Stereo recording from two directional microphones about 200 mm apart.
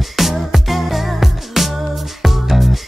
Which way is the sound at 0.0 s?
Centre (ahead or behind).